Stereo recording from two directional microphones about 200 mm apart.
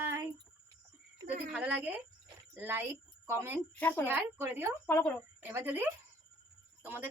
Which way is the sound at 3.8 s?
10° left (ahead or behind).